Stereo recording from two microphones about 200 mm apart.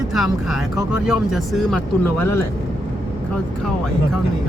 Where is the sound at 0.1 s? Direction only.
Centre (ahead or behind).